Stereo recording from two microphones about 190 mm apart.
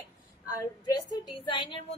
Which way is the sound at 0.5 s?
20° left (ahead or behind).